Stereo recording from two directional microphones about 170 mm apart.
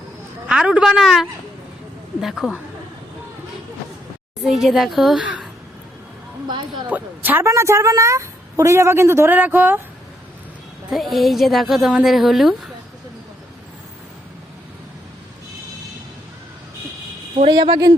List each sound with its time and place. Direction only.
0.4 s a woman's voice: 5° right (ahead or behind)
4.4 s a woman's voice: centre (ahead or behind)
6.5 s speech: 25° right (ahead or behind)
6.8 s a woman's voice: 10° right (ahead or behind)
10.9 s a woman's voice: centre (ahead or behind)
17.3 s speech: 30° right (ahead or behind)